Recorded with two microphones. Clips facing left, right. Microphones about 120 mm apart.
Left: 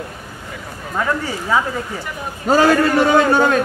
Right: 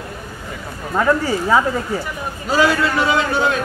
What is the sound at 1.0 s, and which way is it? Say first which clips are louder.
Speech: right 4 dB; 35° right (ahead or behind).